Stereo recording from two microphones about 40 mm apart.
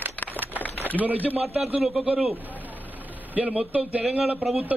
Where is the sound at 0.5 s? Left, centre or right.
Left.